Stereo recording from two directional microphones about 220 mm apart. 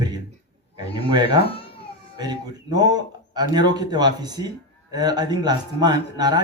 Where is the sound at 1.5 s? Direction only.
25° left (ahead or behind).